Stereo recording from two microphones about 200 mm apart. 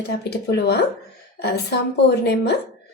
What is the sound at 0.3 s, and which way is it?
A woman's voice, 55° left (ahead or behind).